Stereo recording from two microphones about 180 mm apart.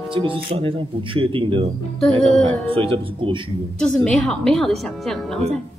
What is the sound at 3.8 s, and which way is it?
Speech, 5° left (ahead or behind).